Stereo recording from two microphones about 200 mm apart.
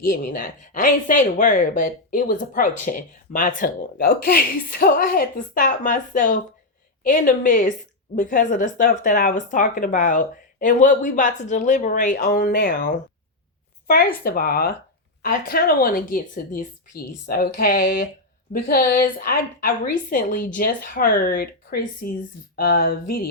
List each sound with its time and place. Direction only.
0.0 s speech: 45° left (ahead or behind)